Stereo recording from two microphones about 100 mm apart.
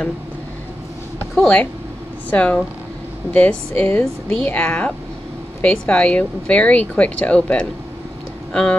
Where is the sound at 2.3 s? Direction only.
15° left (ahead or behind).